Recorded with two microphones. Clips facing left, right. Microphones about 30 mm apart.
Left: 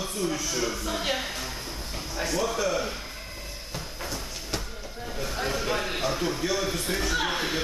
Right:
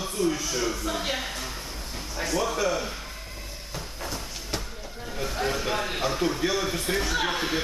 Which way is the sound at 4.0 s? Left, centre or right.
Centre.